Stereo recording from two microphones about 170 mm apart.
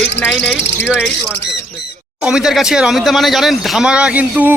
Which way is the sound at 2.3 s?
5° right (ahead or behind).